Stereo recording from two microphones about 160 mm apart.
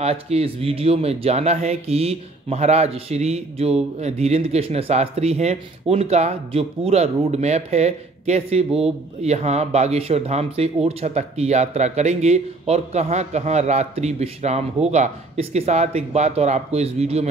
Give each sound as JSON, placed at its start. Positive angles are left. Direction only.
{"t": 0.0, "sound": "speech", "side_deg": -40}